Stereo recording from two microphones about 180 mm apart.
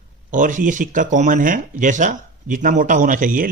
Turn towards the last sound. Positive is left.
turn(degrees=-50)  # may be behind; listen again after turning